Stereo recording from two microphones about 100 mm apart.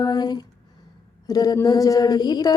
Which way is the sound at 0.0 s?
40° left (ahead or behind).